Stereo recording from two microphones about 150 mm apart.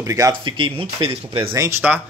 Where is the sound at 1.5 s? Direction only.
15° right (ahead or behind).